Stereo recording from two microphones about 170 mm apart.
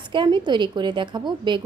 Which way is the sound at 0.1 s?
25° right (ahead or behind).